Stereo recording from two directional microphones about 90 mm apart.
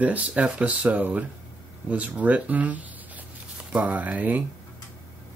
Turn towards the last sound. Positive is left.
turn(degrees=-20)  # may be behind; listen again after turning